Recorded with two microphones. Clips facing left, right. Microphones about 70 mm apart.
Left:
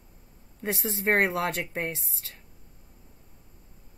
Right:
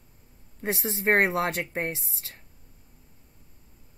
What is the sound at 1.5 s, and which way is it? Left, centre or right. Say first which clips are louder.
Speech: right 1 dB; right.